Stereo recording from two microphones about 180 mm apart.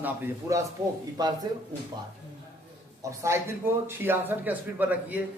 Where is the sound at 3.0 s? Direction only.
15° right (ahead or behind).